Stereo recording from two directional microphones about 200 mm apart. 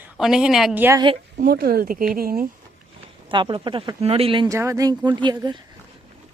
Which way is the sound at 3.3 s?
25° right (ahead or behind).